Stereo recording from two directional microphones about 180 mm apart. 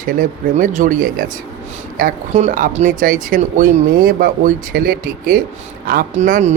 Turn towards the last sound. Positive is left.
turn(degrees=-40)  # may be behind; listen again after turning